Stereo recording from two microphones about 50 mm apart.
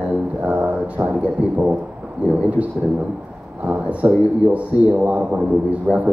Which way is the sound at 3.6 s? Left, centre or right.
Right.